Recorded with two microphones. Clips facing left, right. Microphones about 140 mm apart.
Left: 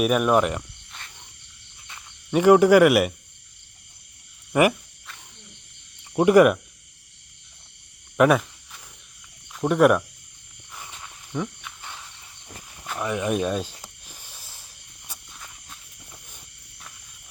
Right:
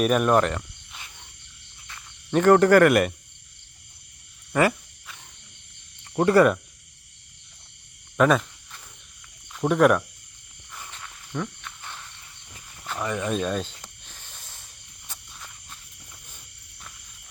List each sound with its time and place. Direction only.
0.0 s speech: 5° left (ahead or behind)
2.3 s speech: 10° left (ahead or behind)
4.5 s speech: 15° left (ahead or behind)
6.1 s speech: 10° left (ahead or behind)
8.2 s a sound: 10° left (ahead or behind)
9.5 s speech: centre (ahead or behind)
10.7 s a sound: 15° left (ahead or behind)